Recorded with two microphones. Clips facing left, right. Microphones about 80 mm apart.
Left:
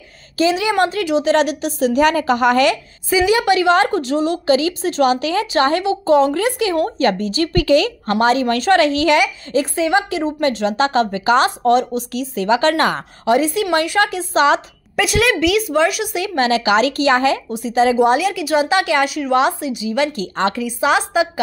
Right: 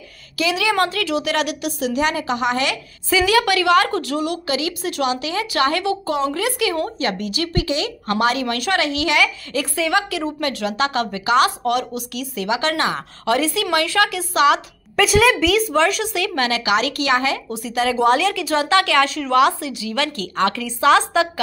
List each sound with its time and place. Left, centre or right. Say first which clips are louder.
0.4 s a woman's voice: left 3 dB; left
3.1 s a woman's voice: left 2 dB; left
5.5 s a woman's voice: left 2 dB; left
7.5 s speech: left 9 dB; left
8.1 s a woman's voice: left 4 dB; left
9.2 s a woman's voice: left 3 dB; left
13.2 s a woman's voice: left 4 dB; left
15.0 s a woman's voice: right 1 dB; centre; by 17.4 s left
17.5 s a woman's voice: left 6 dB; left
19.3 s a woman's voice: right 1 dB; left